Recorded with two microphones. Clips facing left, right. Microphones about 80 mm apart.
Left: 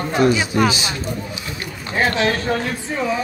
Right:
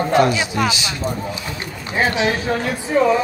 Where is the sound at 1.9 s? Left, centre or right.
Centre.